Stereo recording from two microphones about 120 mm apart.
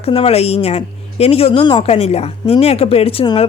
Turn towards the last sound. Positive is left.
turn(degrees=55)  # may be behind; listen again after turning